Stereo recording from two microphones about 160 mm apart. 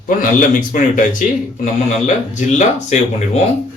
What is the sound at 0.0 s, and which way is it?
A man's voice, 55° left (ahead or behind).